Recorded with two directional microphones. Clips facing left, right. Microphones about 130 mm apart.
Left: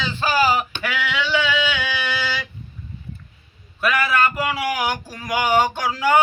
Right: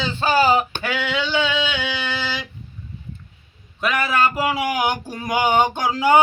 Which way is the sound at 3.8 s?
25° right (ahead or behind).